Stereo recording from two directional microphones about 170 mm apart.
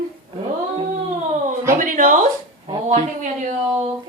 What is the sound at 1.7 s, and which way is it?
Speech, 50° right (ahead or behind).